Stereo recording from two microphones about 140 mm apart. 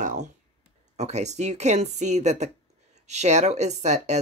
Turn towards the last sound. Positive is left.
turn(degrees=-55)  # may be behind; listen again after turning